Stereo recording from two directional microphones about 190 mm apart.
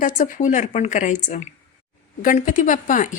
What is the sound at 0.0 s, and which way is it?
A woman's voice, 40° left (ahead or behind).